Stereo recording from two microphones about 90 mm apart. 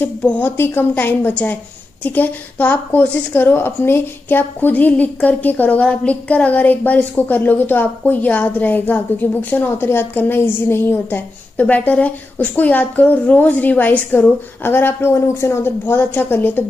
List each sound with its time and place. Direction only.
0.2 s speech: 15° left (ahead or behind)
0.5 s a woman's voice: 25° left (ahead or behind)